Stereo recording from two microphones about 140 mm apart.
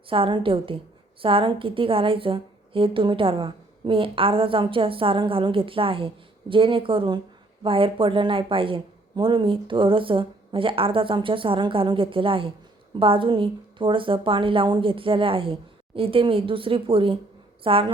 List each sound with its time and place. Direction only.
0.1 s a woman's voice: 35° right (ahead or behind)